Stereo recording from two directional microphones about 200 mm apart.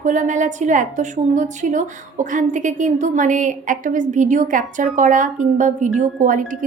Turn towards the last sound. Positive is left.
turn(degrees=-40)  # may be behind; listen again after turning